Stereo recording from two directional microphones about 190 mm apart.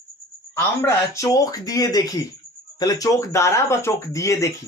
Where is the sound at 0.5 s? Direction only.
15° left (ahead or behind).